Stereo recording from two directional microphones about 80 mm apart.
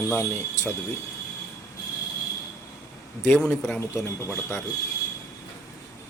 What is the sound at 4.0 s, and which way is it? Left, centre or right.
Speech, left.